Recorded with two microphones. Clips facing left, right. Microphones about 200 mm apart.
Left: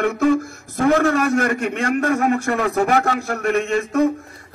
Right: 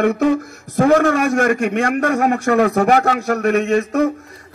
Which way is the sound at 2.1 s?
45° right (ahead or behind).